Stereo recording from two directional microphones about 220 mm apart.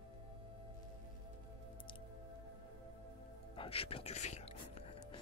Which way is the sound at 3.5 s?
25° left (ahead or behind).